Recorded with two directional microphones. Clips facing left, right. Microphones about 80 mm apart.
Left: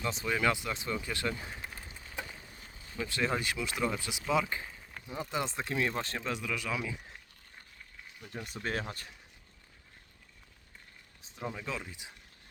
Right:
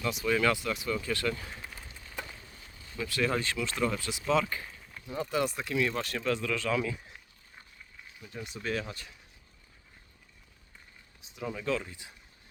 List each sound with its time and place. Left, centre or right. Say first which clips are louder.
0.0 s speech: right 4 dB; left
0.3 s a sound: right 1 dB; left
2.8 s speech: right 2 dB; left
8.4 s speech: right 1 dB; centre
8.6 s speech: right 2 dB; left
11.4 s speech: right 5 dB; centre